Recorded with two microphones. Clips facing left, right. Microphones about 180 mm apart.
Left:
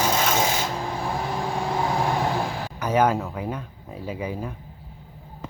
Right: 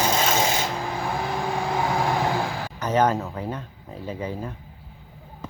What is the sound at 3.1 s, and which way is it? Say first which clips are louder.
Speech: left 1 dB; centre (ahead or behind).